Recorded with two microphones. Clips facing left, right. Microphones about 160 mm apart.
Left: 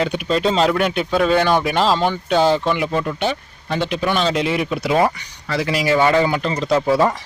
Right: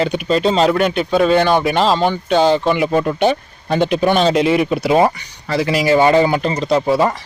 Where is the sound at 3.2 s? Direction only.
50° right (ahead or behind).